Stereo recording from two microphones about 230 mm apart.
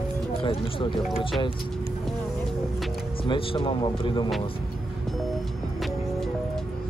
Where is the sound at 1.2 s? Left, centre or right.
Left.